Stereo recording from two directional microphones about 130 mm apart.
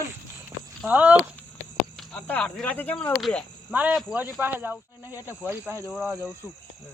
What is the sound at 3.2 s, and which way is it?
Speech, centre (ahead or behind).